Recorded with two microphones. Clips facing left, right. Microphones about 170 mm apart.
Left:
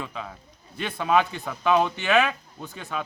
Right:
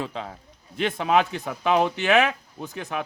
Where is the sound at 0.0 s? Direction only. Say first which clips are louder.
Right 3 dB; 30° right (ahead or behind).